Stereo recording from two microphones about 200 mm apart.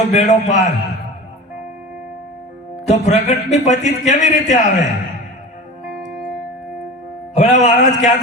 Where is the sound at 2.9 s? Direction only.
35° left (ahead or behind).